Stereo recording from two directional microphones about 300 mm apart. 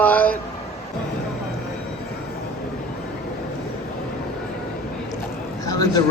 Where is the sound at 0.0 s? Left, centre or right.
Centre.